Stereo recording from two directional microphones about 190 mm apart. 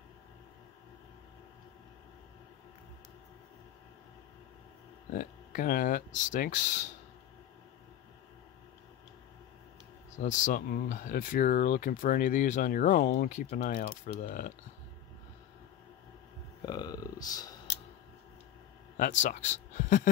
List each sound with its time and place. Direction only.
5.1 s speech: 45° left (ahead or behind)
10.1 s speech: 40° left (ahead or behind)
16.6 s speech: 20° left (ahead or behind)
19.2 s speech: 40° left (ahead or behind)